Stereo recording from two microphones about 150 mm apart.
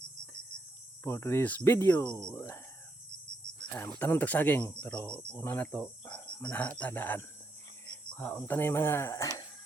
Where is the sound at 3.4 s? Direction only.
30° left (ahead or behind).